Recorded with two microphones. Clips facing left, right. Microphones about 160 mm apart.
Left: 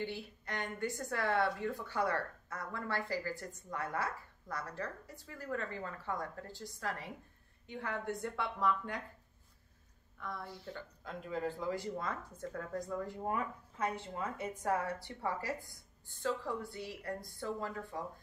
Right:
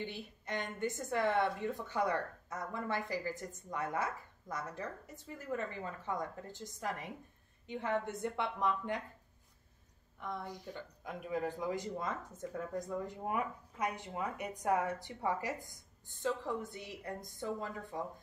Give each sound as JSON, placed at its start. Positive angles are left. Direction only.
{"t": 0.0, "sound": "speech", "side_deg": -20}
{"t": 10.2, "sound": "speech", "side_deg": -20}